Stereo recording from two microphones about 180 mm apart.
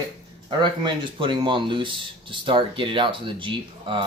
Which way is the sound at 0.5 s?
25° right (ahead or behind).